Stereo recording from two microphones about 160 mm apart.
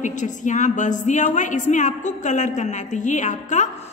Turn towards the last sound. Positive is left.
turn(degrees=50)  # may be behind; listen again after turning